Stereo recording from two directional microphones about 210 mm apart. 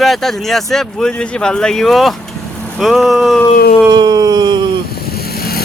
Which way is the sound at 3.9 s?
20° right (ahead or behind).